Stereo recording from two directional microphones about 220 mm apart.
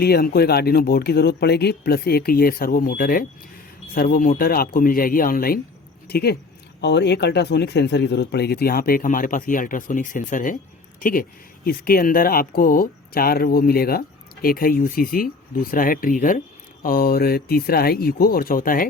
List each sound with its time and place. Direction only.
0.0 s speech: 45° left (ahead or behind)